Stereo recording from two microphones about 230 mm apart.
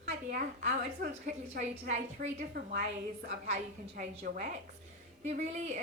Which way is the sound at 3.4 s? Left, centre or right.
Right.